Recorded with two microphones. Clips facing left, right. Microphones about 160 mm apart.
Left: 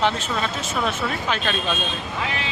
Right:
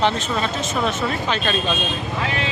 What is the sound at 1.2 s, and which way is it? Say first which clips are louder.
Speech: right 2 dB; 5° left (ahead or behind).